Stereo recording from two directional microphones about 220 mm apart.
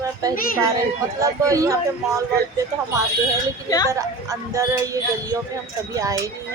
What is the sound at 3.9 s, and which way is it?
Speech, 15° right (ahead or behind).